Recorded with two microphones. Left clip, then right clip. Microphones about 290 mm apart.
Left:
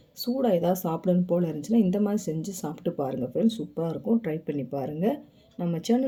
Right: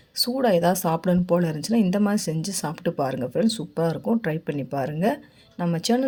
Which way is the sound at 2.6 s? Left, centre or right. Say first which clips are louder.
Right 5 dB; right.